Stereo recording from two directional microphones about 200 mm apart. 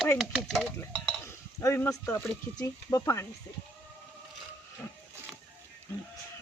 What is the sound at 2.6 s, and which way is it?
Speech, 15° left (ahead or behind).